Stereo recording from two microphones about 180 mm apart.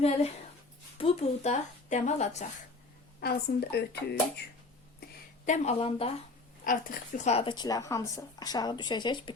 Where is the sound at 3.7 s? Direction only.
65° left (ahead or behind).